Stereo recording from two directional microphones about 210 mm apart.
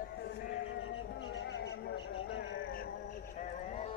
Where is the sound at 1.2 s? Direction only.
60° left (ahead or behind).